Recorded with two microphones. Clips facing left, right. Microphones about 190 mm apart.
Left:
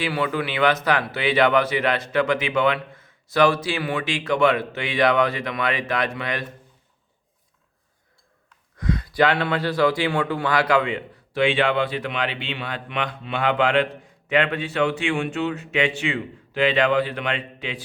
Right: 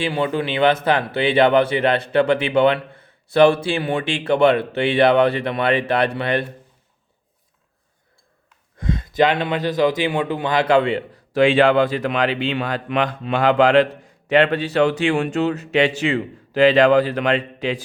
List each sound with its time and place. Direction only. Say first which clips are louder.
0.0 s speech: right 3 dB; 25° right (ahead or behind)
8.8 s speech: right 2 dB; 25° right (ahead or behind); by 17.8 s 40° right (ahead or behind)